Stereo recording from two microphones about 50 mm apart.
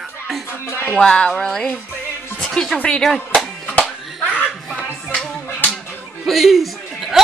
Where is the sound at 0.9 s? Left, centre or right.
Centre.